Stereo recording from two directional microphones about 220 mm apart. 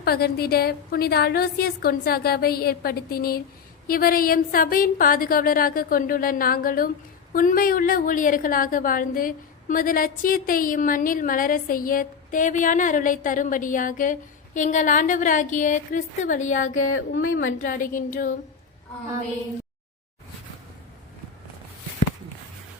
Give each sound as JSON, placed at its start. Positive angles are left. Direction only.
{"t": 0.0, "sound": "a woman's voice", "side_deg": 45}
{"t": 17.2, "sound": "a woman's voice", "side_deg": 65}
{"t": 17.6, "sound": "a woman's voice", "side_deg": 35}